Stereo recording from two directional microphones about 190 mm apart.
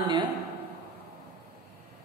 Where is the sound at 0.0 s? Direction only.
25° right (ahead or behind).